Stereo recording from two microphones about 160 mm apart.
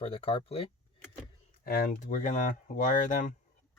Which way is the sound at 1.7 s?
65° left (ahead or behind).